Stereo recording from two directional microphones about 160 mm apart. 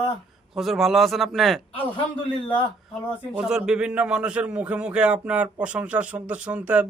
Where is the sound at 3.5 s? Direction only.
5° right (ahead or behind).